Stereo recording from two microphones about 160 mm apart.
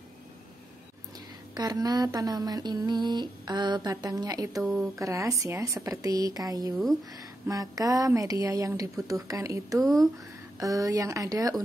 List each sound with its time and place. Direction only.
1.5 s speech: 25° right (ahead or behind)
9.8 s speech: centre (ahead or behind)
10.6 s speech: 20° right (ahead or behind)